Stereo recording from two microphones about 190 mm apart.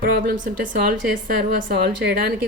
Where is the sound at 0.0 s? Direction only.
50° right (ahead or behind).